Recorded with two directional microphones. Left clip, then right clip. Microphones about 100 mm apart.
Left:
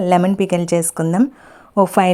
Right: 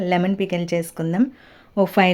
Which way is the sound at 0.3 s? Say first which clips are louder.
Left 6 dB; 50° left (ahead or behind).